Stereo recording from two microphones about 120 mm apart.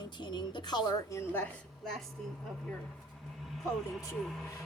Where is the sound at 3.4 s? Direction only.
Centre (ahead or behind).